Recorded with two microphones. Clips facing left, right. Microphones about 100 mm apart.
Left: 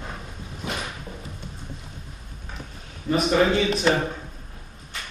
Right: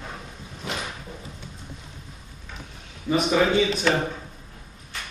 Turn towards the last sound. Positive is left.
turn(degrees=0)  # may be behind; listen again after turning